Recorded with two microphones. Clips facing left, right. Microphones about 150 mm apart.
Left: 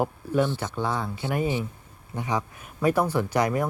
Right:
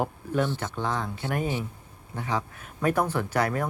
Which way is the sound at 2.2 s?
15° left (ahead or behind).